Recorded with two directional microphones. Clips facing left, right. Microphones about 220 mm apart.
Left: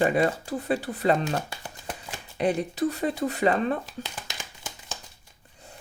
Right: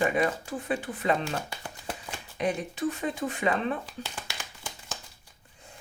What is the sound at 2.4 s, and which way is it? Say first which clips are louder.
Speech: left 5 dB; 35° left (ahead or behind).